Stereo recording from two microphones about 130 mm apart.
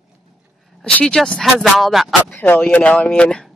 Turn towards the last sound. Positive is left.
turn(degrees=5)  # may be behind; listen again after turning